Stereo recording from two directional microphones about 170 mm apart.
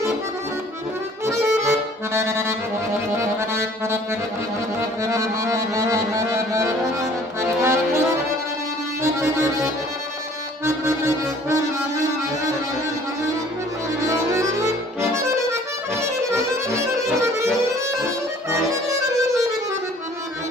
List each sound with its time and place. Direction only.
1.2 s accordion: 15° right (ahead or behind)
9.0 s accordion: 15° right (ahead or behind)
14.0 s music: 15° right (ahead or behind)
16.0 s accordion: 15° right (ahead or behind)
18.5 s music: 20° right (ahead or behind)